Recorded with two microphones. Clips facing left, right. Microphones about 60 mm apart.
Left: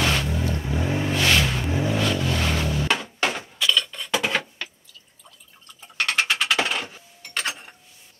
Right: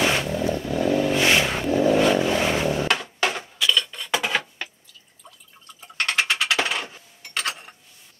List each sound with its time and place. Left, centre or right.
0.0 s vehicle: centre
0.6 s vehicle: left
1.1 s vehicle: centre
2.0 s a sound: right
3.3 s a sound: centre
5.8 s mechanisms: centre